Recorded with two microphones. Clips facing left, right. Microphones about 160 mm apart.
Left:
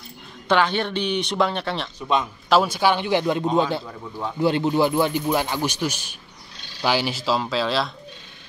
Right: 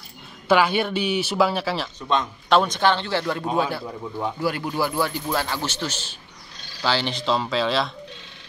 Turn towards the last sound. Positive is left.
turn(degrees=0)  # may be behind; listen again after turning